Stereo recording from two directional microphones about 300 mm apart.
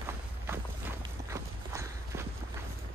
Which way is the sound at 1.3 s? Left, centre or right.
Centre.